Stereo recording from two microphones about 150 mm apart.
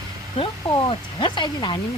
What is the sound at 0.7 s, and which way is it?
Speech, 30° left (ahead or behind).